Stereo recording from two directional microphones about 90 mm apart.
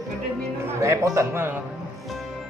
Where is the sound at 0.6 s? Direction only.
35° right (ahead or behind).